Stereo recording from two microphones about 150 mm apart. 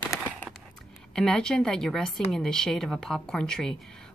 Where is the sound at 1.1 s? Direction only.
5° left (ahead or behind).